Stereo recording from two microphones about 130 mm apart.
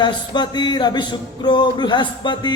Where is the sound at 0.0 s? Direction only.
35° left (ahead or behind).